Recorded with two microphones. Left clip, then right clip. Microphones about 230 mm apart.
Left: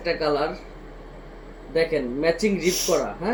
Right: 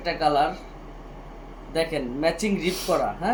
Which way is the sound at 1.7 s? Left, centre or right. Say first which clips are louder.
Left 3 dB; centre.